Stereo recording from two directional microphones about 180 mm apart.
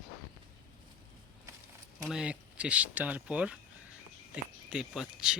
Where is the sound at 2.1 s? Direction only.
5° right (ahead or behind).